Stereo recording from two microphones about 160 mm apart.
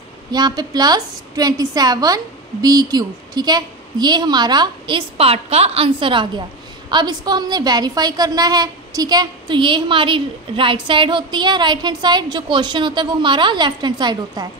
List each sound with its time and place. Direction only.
0.3 s a woman's voice: 25° right (ahead or behind)